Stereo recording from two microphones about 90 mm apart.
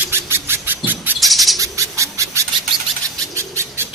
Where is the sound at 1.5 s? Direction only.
35° right (ahead or behind).